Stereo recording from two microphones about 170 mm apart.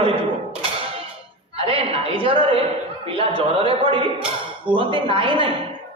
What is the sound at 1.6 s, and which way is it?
A man's voice, 35° right (ahead or behind).